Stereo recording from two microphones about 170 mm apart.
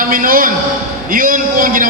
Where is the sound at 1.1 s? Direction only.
55° right (ahead or behind).